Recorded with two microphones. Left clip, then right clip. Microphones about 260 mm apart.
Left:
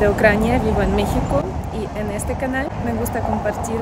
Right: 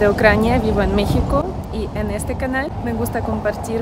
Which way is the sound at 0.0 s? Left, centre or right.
Centre.